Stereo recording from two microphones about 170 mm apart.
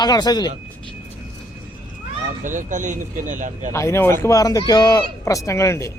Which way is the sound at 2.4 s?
50° right (ahead or behind).